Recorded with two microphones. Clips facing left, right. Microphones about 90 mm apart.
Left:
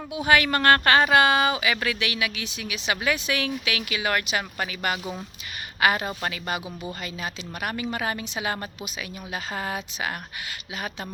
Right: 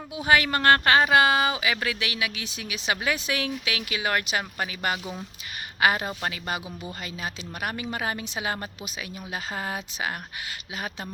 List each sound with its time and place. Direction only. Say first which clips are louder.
0.3 s speech: left 1 dB; 25° right (ahead or behind)